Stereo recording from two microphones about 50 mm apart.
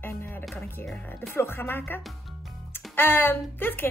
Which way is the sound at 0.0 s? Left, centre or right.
Left.